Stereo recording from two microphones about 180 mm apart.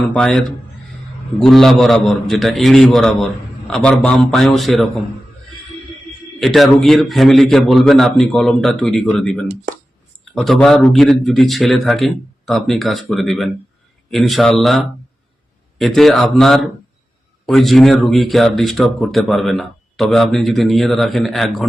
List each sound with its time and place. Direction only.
0.1 s speech: 5° left (ahead or behind)
6.4 s speech: centre (ahead or behind)